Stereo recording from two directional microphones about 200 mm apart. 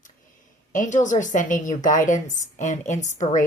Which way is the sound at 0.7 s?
40° left (ahead or behind).